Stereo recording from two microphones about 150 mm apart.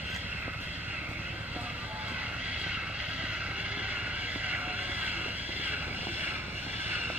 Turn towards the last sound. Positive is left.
turn(degrees=-10)  # may be behind; listen again after turning